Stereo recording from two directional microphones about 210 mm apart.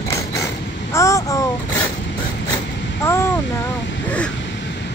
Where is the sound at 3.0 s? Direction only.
10° left (ahead or behind).